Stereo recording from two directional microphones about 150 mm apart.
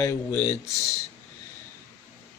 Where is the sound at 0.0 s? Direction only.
20° left (ahead or behind).